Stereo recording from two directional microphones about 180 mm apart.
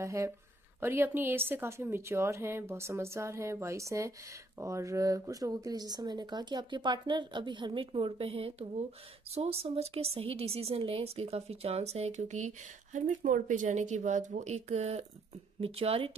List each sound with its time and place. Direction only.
0.0 s a woman's voice: 15° right (ahead or behind); by 16.1 s 35° right (ahead or behind)